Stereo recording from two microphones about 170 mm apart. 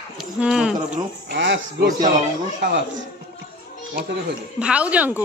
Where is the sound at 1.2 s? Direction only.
90° right.